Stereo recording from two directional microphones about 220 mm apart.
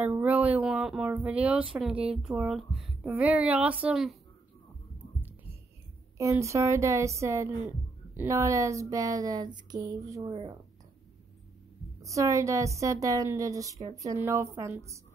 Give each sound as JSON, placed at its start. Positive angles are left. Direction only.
{"t": 0.0, "sound": "speech", "side_deg": -5}
{"t": 5.2, "sound": "heart sounds", "side_deg": -10}
{"t": 6.1, "sound": "a woman's voice", "side_deg": -15}
{"t": 12.0, "sound": "a woman's voice", "side_deg": -15}